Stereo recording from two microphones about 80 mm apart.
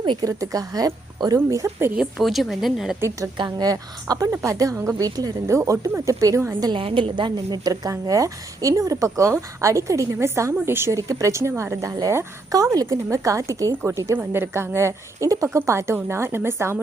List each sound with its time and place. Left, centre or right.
0.2 s a woman's voice: right
2.0 s a woman's voice: centre
3.3 s a woman's voice: right
3.7 s a woman's voice: right
6.6 s a woman's voice: right
10.9 s a woman's voice: right
12.5 s a woman's voice: right
14.2 s a woman's voice: right